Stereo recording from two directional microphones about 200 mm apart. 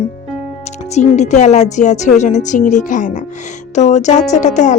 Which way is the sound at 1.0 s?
35° left (ahead or behind).